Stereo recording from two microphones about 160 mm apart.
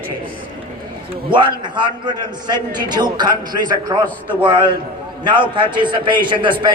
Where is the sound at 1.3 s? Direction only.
30° right (ahead or behind).